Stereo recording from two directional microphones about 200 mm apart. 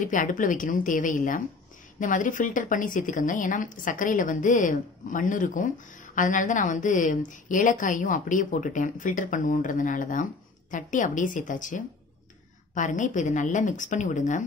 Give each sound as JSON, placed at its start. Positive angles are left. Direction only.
{"t": 0.0, "sound": "a woman's voice", "side_deg": 40}